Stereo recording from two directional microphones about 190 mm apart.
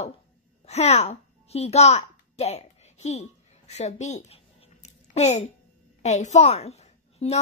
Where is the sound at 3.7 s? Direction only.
35° left (ahead or behind).